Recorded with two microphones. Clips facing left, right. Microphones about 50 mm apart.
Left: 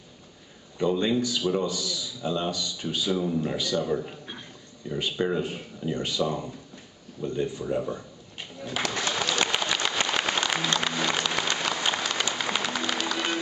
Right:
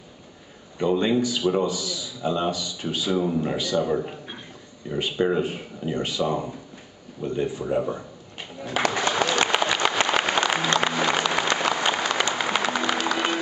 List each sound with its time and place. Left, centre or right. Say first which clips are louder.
0.7 s a man's voice: right 3 dB; centre
7.2 s a sound: right 3 dB; centre
10.8 s applause: right 4 dB; centre
11.5 s music: right 5 dB; centre